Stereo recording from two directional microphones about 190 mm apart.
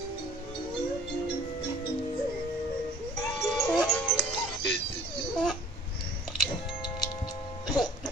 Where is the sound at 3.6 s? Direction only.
5° left (ahead or behind).